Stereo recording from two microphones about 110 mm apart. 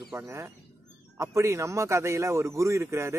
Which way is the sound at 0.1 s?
25° right (ahead or behind).